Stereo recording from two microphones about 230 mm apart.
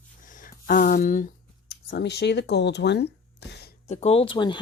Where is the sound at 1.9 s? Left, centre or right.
Left.